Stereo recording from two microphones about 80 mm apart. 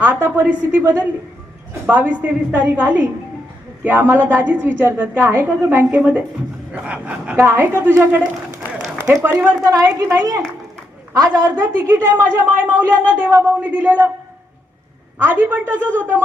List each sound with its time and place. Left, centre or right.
0.0 s a woman's voice: right
7.4 s a woman's voice: right
9.3 s a woman's voice: right
9.6 s a woman's voice: right
11.5 s a woman's voice: right
15.2 s a woman's voice: right